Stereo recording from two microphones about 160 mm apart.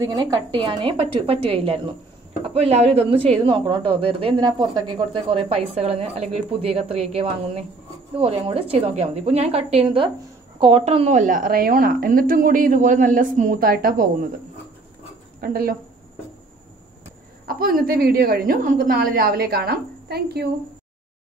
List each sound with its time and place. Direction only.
0.0 s a woman's voice: 30° right (ahead or behind); by 14.1 s 65° right (ahead or behind)
15.4 s a woman's voice: 70° right (ahead or behind)
17.5 s a woman's voice: 65° right (ahead or behind); by 20.4 s 80° right